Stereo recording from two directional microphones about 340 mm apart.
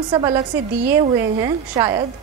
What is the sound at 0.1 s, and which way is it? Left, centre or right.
Speech, centre.